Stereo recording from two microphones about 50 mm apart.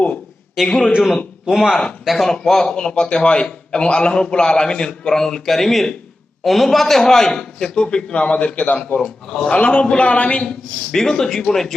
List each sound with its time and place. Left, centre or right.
0.7 s a man's voice: centre
1.5 s speech: centre
2.0 s speech: centre; by 8.8 s left
9.0 s a man's voice: centre